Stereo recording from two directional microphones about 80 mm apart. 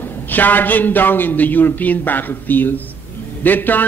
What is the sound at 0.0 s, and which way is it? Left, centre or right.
A man's voice, left.